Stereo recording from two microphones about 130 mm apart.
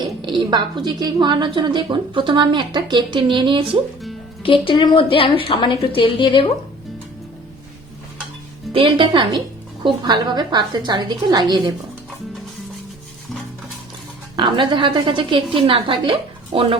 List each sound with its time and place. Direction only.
0.0 s a woman's voice: 35° right (ahead or behind)
4.4 s a woman's voice: 40° left (ahead or behind)
8.7 s a woman's voice: 40° right (ahead or behind)
14.3 s a woman's voice: 40° right (ahead or behind)